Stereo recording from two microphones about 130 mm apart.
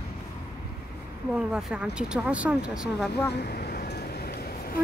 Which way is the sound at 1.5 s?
5° right (ahead or behind).